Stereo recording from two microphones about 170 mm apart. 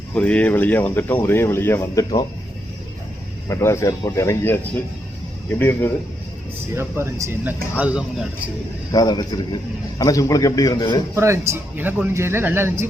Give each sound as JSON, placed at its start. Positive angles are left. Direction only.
{"t": 0.1, "sound": "speech", "side_deg": 10}
{"t": 3.5, "sound": "speech", "side_deg": 15}
{"t": 5.5, "sound": "speech", "side_deg": 15}
{"t": 6.7, "sound": "speech", "side_deg": -15}
{"t": 8.9, "sound": "a man's voice", "side_deg": 25}
{"t": 11.1, "sound": "speech", "side_deg": -15}